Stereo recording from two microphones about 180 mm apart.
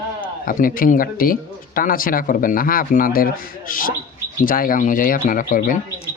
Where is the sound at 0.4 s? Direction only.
50° left (ahead or behind).